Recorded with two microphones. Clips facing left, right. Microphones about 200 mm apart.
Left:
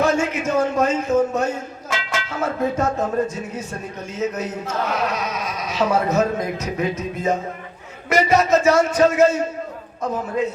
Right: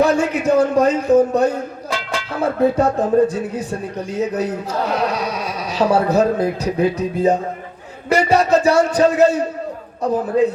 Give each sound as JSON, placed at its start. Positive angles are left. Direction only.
{"t": 0.0, "sound": "a man's voice", "side_deg": -35}